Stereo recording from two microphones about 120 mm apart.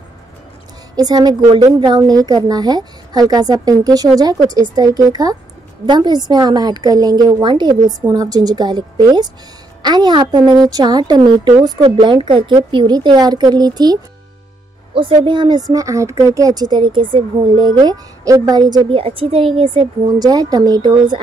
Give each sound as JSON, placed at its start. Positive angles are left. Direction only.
{"t": 0.9, "sound": "a woman's voice", "side_deg": -35}
{"t": 11.8, "sound": "a woman's voice", "side_deg": -45}
{"t": 15.1, "sound": "a woman's voice", "side_deg": -40}
{"t": 20.2, "sound": "a woman's voice", "side_deg": -30}